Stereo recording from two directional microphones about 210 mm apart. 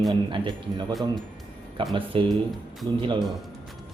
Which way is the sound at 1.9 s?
25° right (ahead or behind).